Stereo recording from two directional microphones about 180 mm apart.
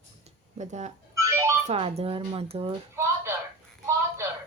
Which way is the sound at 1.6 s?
35° right (ahead or behind).